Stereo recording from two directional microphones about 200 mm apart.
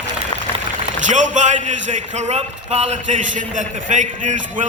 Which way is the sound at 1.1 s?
40° right (ahead or behind).